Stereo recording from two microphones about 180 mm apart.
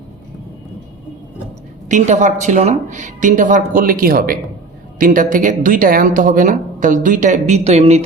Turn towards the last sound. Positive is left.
turn(degrees=-35)  # may be behind; listen again after turning